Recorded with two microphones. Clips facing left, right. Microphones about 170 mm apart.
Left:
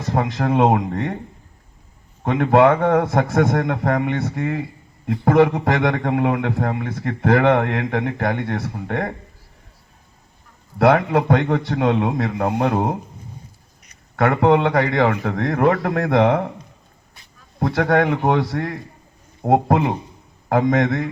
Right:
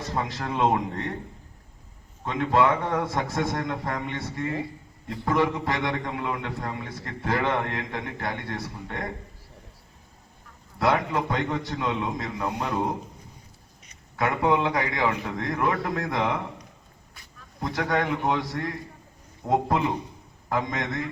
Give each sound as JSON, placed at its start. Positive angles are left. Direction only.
{"t": 0.1, "sound": "a man's voice", "side_deg": 60}
{"t": 2.2, "sound": "a man's voice", "side_deg": 65}
{"t": 10.8, "sound": "a man's voice", "side_deg": 60}
{"t": 14.2, "sound": "a man's voice", "side_deg": 65}
{"t": 17.6, "sound": "a man's voice", "side_deg": 65}